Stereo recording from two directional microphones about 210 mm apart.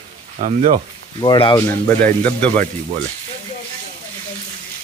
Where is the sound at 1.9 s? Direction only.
10° left (ahead or behind).